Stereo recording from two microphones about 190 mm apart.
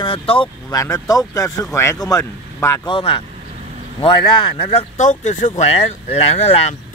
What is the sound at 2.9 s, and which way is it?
Speech, 30° left (ahead or behind).